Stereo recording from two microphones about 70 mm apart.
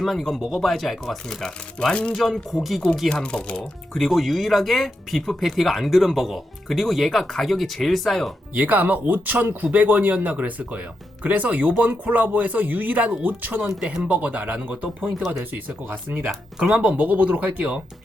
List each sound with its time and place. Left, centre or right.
0.0 s speech: centre
2.1 s speech: centre
3.6 s speech: centre
8.5 s speech: right
13.7 s speech: centre; by 16.3 s right
16.3 s speech: centre